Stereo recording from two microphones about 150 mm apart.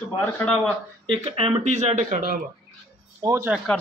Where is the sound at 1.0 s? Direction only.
35° right (ahead or behind); by 2.4 s 65° right (ahead or behind).